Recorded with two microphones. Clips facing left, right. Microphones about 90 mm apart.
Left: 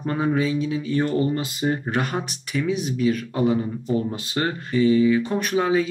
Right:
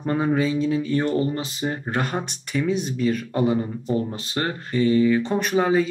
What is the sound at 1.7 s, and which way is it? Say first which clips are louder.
Speech: left 2 dB; centre (ahead or behind).